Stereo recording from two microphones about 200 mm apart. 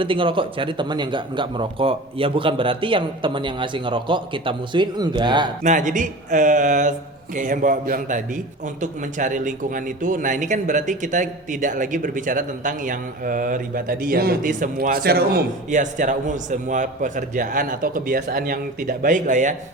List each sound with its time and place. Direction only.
0.0 s speech: 25° right (ahead or behind)
5.6 s a man's voice: 40° right (ahead or behind)